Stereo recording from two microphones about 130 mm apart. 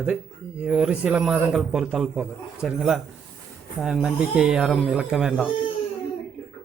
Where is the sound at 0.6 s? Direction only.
5° right (ahead or behind).